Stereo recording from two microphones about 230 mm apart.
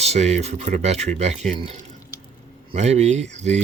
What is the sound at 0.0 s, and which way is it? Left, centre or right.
Speech, right.